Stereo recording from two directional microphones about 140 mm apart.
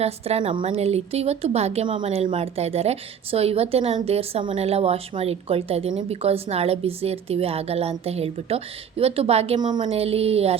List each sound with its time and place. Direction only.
0.0 s a woman's voice: 45° right (ahead or behind)
9.6 s a woman's voice: 30° right (ahead or behind)